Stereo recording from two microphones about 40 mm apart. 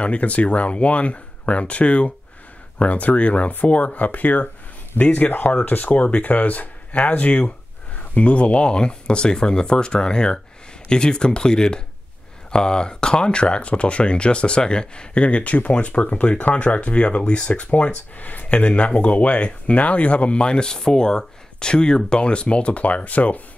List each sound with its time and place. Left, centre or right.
0.0 s speech: left